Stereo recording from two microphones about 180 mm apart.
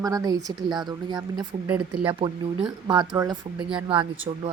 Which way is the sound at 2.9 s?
20° right (ahead or behind).